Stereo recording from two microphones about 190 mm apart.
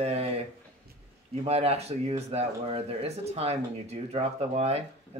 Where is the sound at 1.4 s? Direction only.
30° right (ahead or behind).